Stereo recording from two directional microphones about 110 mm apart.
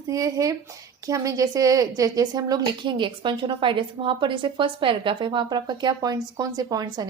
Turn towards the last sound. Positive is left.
turn(degrees=-35)  # may be behind; listen again after turning